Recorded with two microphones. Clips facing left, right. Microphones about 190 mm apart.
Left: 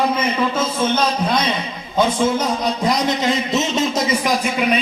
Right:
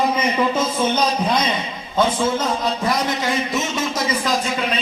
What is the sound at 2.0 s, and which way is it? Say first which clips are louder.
A man's voice: left 2 dB; 15° left (ahead or behind).